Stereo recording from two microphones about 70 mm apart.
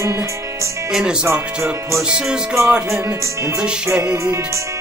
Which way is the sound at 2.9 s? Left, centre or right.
Right.